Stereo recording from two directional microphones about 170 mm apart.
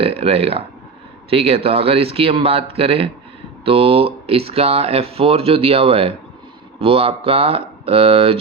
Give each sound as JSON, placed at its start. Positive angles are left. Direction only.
{"t": 0.0, "sound": "speech", "side_deg": -35}